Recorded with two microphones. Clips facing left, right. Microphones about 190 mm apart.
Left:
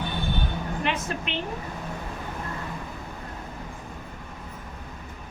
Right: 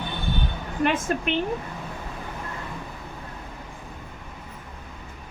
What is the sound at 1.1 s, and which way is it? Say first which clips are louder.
Speech: right 6 dB; 50° right (ahead or behind).